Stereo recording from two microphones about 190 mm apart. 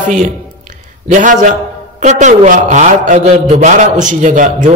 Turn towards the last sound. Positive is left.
turn(degrees=-40)  # may be behind; listen again after turning